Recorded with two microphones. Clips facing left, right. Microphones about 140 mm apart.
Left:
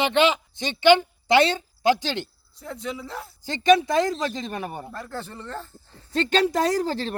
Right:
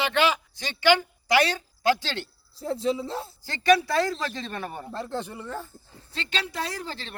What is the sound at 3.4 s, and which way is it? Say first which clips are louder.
A man's voice: left 3 dB; 20° left (ahead or behind).